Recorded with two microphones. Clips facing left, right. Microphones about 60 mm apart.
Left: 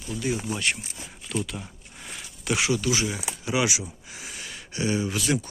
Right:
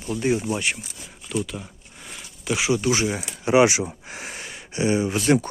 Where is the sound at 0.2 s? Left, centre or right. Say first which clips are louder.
Right 6 dB; right.